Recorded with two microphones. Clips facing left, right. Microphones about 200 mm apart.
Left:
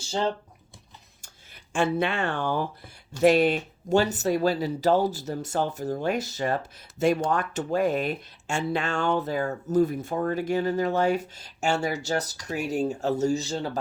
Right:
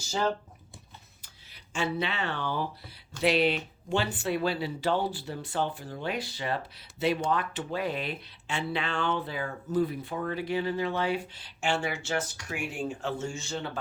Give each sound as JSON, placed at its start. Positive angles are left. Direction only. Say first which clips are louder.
{"t": 0.0, "sound": "speech", "louder": "left 2 dB", "side_deg": 30}
{"t": 1.7, "sound": "speech", "louder": "left 6 dB", "side_deg": 50}